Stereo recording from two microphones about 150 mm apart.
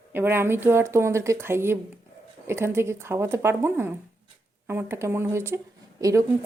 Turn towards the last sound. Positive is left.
turn(degrees=-20)  # may be behind; listen again after turning